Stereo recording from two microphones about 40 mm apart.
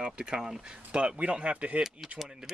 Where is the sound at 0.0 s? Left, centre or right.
Right.